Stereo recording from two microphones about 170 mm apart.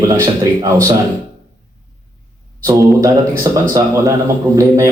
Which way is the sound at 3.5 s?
20° right (ahead or behind).